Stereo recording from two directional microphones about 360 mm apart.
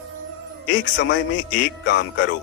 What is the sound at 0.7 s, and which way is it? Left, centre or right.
A man's voice, left.